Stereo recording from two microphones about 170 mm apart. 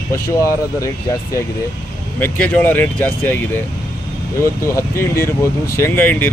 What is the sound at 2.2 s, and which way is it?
Speech, 5° left (ahead or behind).